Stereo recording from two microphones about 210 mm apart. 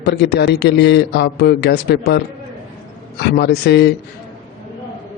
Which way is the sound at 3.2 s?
50° left (ahead or behind).